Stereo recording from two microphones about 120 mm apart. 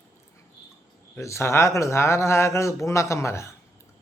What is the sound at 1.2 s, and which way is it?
Speech, 25° left (ahead or behind).